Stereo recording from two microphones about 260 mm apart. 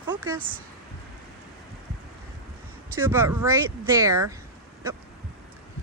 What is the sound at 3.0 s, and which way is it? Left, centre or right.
Speech, centre.